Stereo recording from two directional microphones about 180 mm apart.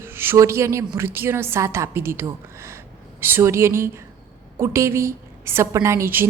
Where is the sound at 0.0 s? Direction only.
10° right (ahead or behind).